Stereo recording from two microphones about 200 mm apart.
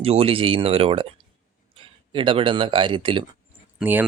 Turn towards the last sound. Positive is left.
turn(degrees=-10)  # may be behind; listen again after turning